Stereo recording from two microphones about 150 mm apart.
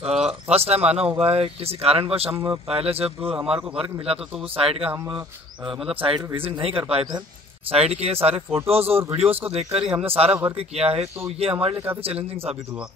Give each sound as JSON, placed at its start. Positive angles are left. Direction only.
{"t": 0.1, "sound": "speech", "side_deg": -5}
{"t": 0.5, "sound": "a man's voice", "side_deg": -45}
{"t": 2.3, "sound": "speech", "side_deg": -20}
{"t": 2.7, "sound": "a man's voice", "side_deg": -40}
{"t": 5.7, "sound": "speech", "side_deg": -5}
{"t": 6.0, "sound": "a man's voice", "side_deg": -35}